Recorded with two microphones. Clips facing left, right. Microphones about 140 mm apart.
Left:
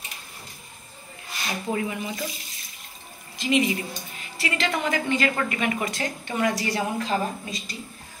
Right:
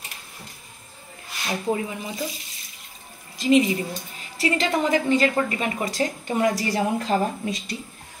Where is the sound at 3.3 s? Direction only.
35° right (ahead or behind).